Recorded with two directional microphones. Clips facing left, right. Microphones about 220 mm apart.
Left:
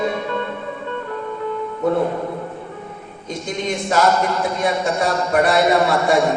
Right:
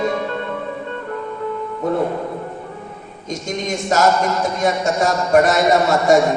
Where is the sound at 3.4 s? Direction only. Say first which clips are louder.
Right 1 dB; 45° right (ahead or behind).